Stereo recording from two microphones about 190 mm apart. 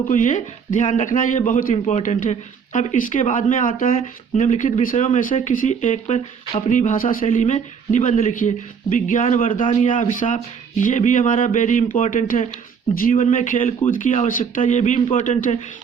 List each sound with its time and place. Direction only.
0.1 s speech: 40° left (ahead or behind)